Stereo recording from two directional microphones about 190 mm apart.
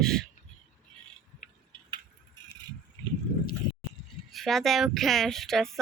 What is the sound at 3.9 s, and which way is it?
Speech, centre (ahead or behind).